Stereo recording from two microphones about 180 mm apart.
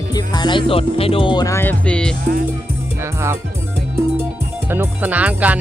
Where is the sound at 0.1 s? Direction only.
25° left (ahead or behind); by 2.1 s 5° left (ahead or behind).